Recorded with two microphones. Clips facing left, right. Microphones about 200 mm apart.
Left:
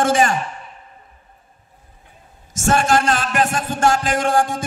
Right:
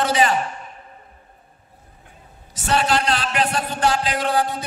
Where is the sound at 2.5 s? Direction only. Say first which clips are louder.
Left 4 dB; 45° left (ahead or behind).